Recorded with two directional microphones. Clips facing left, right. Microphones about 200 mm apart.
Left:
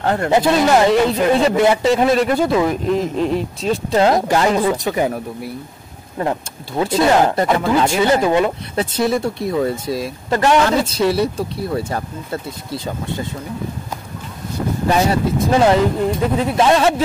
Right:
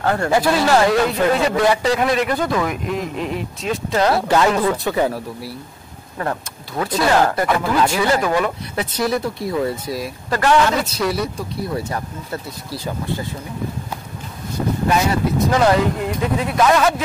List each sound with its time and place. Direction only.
0.0 s speech: 20° left (ahead or behind)
4.5 s speech: 15° left (ahead or behind)
15.4 s speech: 30° left (ahead or behind)